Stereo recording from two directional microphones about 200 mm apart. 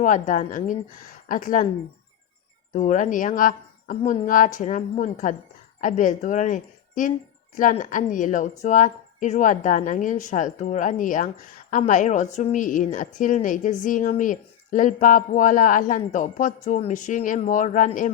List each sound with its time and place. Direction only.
0.0 s a woman's voice: 40° left (ahead or behind)
2.7 s a woman's voice: 40° left (ahead or behind)